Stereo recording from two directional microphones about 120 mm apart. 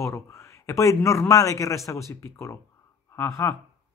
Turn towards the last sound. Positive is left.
turn(degrees=20)  # may be behind; listen again after turning